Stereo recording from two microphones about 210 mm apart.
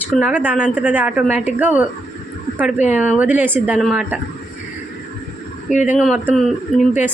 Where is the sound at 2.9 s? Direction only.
5° right (ahead or behind).